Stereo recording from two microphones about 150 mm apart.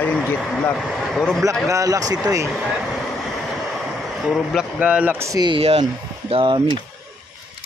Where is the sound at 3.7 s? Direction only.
Centre (ahead or behind); by 6.8 s 30° right (ahead or behind).